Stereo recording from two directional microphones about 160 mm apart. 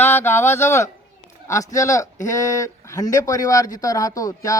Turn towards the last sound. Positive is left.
turn(degrees=20)  # may be behind; listen again after turning